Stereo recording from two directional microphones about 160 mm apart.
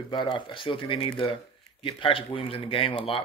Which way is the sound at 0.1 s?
30° left (ahead or behind).